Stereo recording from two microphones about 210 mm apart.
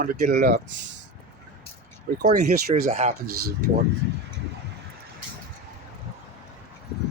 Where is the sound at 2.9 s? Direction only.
30° right (ahead or behind).